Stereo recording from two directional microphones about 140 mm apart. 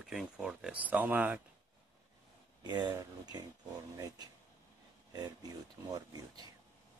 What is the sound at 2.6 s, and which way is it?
Speech, 30° right (ahead or behind).